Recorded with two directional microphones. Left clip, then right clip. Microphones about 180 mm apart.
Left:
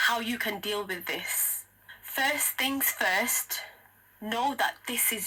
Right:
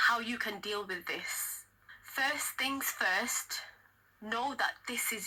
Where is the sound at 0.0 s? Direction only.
45° left (ahead or behind).